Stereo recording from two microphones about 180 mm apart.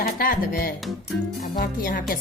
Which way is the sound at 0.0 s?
50° left (ahead or behind).